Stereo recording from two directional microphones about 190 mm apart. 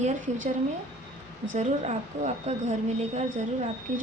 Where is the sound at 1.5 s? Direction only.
35° right (ahead or behind).